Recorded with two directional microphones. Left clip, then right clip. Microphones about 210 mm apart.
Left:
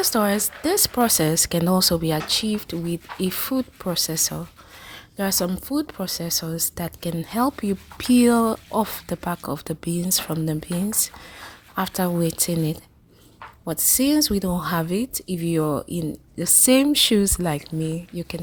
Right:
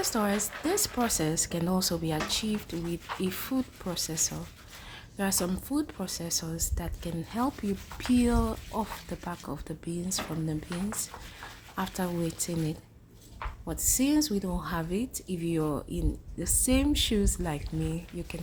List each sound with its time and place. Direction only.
0.0 s speech: 35° left (ahead or behind)
11.7 s speech: 35° left (ahead or behind)